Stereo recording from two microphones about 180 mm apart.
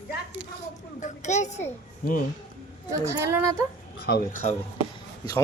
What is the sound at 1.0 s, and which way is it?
A child's voice, 40° left (ahead or behind).